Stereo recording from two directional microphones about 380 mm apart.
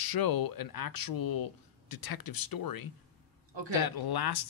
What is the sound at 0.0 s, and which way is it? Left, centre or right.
Speech, left.